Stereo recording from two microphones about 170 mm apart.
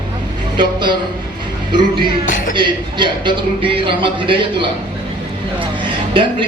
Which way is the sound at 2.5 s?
25° right (ahead or behind).